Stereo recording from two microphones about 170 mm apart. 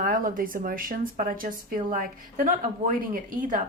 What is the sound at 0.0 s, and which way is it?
A woman's voice, 55° right (ahead or behind).